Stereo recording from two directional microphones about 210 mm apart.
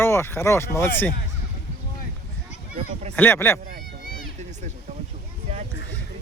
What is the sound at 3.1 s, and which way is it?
Speech, 10° left (ahead or behind).